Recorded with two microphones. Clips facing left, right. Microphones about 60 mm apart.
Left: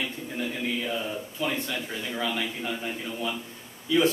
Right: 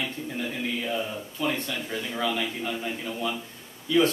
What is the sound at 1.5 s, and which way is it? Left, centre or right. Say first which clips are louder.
A man's voice: right 1 dB; centre.